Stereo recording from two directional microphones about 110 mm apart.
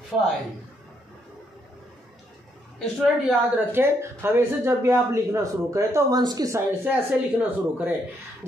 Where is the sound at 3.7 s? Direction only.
20° right (ahead or behind).